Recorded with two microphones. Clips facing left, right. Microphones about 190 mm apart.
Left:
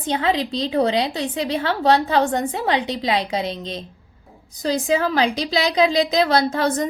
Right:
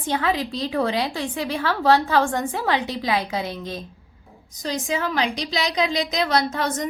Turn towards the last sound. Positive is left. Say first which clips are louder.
# left 4 dB
turn(degrees=30)  # may be behind; listen again after turning